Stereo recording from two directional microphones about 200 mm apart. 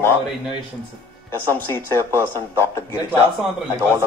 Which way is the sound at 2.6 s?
10° left (ahead or behind).